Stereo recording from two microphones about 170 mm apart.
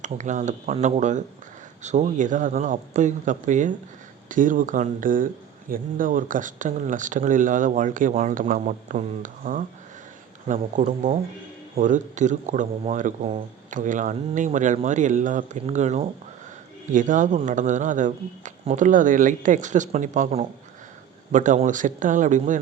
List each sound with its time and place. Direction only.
0.0 s speech: 45° right (ahead or behind)